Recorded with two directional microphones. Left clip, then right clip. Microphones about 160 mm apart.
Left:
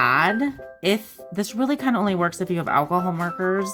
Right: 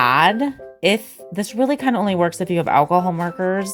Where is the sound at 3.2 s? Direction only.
40° right (ahead or behind).